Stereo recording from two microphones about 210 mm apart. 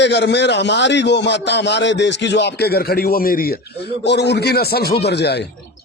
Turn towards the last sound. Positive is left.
turn(degrees=50)  # may be behind; listen again after turning